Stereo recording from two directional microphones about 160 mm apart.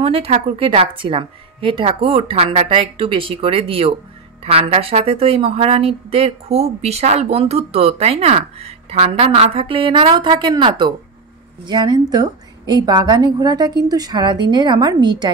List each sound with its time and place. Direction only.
0.0 s a woman's voice: 35° right (ahead or behind)